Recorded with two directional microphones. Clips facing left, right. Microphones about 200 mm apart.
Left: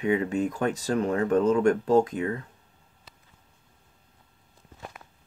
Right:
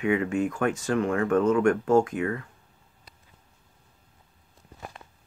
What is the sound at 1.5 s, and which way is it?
Speech, 25° left (ahead or behind).